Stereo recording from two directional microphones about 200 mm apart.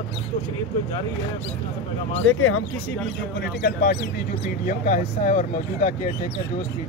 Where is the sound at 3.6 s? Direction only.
55° left (ahead or behind).